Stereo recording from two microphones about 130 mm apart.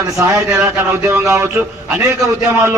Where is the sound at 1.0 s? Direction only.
20° right (ahead or behind).